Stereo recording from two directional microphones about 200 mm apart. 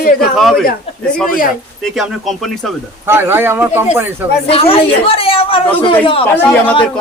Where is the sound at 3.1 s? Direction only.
10° right (ahead or behind).